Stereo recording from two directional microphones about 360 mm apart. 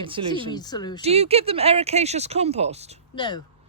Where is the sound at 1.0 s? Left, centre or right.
Centre.